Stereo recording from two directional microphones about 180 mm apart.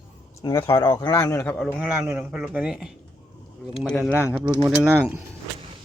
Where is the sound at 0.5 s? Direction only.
15° left (ahead or behind).